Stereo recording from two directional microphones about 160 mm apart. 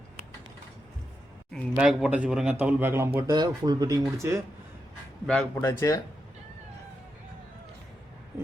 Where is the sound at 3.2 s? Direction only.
25° right (ahead or behind).